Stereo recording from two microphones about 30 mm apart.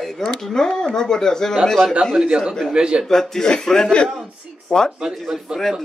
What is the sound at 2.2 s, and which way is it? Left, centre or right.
Speech, right.